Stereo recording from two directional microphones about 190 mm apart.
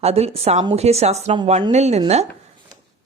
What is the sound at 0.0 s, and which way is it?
A woman's voice, 35° right (ahead or behind).